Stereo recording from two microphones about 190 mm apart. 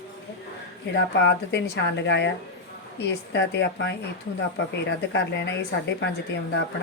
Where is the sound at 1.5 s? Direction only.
65° left (ahead or behind).